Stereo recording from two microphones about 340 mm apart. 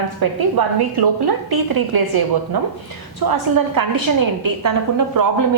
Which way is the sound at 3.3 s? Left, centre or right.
Right.